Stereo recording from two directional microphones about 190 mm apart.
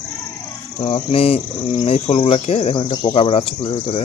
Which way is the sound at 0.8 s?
30° left (ahead or behind).